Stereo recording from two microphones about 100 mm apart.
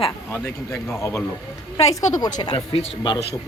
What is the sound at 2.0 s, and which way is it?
Speech, 40° left (ahead or behind).